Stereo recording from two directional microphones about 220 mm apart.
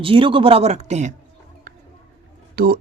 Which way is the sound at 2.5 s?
45° right (ahead or behind).